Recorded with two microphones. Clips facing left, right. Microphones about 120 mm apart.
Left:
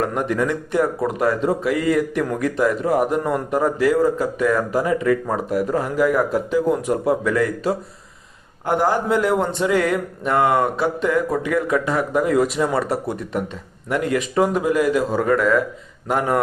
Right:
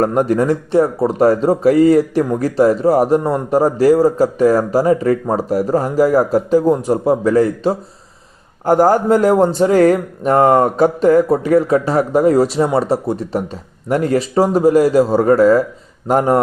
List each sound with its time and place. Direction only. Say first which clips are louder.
0.0 s speech: right 7 dB; 40° right (ahead or behind)
8.6 s speech: right 7 dB; 40° right (ahead or behind)